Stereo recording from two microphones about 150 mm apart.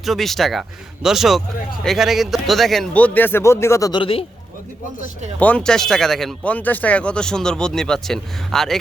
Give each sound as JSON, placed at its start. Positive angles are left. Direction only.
{"t": 0.0, "sound": "speech", "side_deg": 0}
{"t": 4.0, "sound": "speech", "side_deg": 40}
{"t": 5.4, "sound": "speech", "side_deg": 10}